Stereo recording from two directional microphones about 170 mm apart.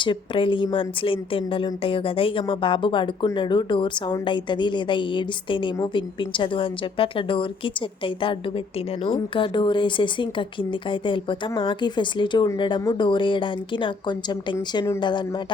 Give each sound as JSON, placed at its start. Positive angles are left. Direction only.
{"t": 0.0, "sound": "speech", "side_deg": 30}